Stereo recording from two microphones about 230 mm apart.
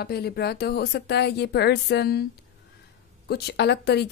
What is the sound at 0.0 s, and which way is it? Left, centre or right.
Speech, left.